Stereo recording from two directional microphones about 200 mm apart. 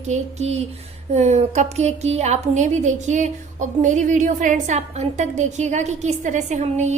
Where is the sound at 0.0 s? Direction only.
35° right (ahead or behind).